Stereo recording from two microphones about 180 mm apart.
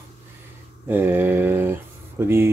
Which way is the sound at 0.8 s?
10° right (ahead or behind).